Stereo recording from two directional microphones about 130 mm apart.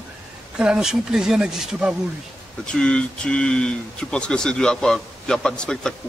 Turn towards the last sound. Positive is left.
turn(degrees=5)  # may be behind; listen again after turning